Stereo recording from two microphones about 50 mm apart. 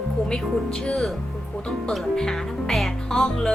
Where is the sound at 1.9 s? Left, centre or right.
Centre.